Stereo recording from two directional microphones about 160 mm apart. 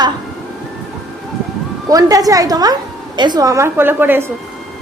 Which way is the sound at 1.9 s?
20° right (ahead or behind).